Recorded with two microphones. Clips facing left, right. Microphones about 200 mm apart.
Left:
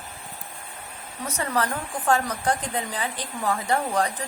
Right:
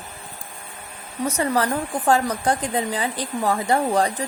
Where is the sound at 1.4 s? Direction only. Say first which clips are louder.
Right 4 dB; 30° right (ahead or behind).